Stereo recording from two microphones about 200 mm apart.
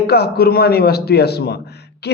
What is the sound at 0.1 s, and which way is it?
A man's voice, 50° left (ahead or behind).